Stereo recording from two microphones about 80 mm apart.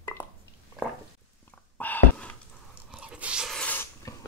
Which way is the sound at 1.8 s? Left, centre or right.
Left.